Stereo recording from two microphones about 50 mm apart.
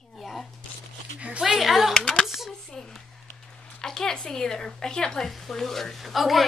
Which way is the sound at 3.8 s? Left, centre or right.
Centre.